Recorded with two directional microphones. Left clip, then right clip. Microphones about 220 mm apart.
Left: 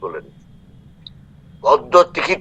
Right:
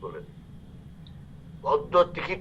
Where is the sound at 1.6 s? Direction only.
60° left (ahead or behind).